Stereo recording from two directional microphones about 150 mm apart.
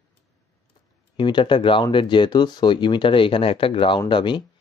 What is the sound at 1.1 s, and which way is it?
Speech, 30° left (ahead or behind).